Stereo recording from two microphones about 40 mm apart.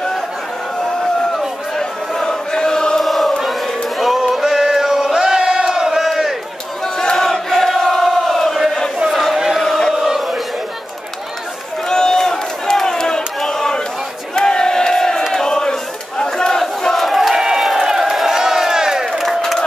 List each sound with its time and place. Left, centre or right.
2.2 s choir: centre
3.0 s chant: centre
3.4 s a sound: centre
4.3 s chant: centre
5.8 s battle cry: centre
6.0 s crowd: centre
7.0 s a sound: centre
9.6 s chant: centre
9.9 s chant: centre
11.9 s crowd: centre
15.3 s battle cry: centre
16.9 s crowd: centre